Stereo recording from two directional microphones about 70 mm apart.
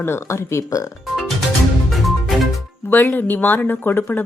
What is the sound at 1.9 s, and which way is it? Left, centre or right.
Music, centre.